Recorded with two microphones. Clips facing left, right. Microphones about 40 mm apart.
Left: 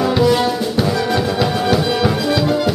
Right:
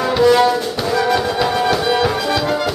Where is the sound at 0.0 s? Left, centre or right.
Centre.